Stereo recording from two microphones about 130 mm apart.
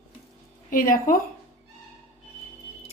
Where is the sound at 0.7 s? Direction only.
90° left.